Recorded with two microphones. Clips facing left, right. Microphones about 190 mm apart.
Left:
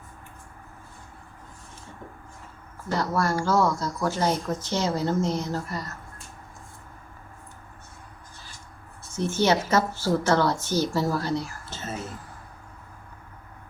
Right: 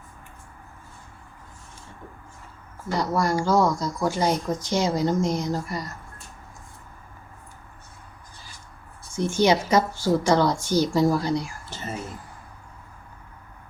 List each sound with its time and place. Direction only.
2.9 s speech: 15° right (ahead or behind)
9.1 s speech: 15° right (ahead or behind)